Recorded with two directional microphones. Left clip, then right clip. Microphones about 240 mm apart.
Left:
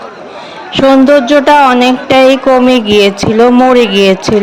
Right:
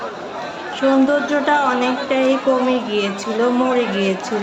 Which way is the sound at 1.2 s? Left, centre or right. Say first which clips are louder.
Left 11 dB; left.